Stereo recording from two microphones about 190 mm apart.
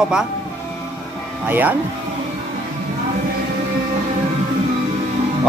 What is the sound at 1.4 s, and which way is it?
Speech, 10° right (ahead or behind).